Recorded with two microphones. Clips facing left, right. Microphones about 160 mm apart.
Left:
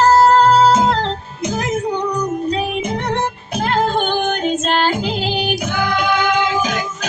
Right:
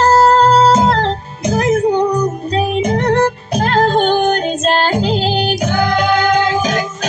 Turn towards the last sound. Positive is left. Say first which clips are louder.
# right 3 dB
turn(degrees=-35)  # may be behind; listen again after turning